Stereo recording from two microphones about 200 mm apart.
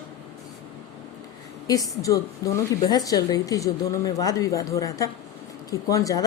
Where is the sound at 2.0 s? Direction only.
15° left (ahead or behind).